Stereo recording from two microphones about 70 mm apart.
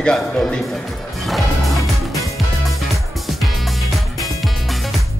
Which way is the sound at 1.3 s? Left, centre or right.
Centre.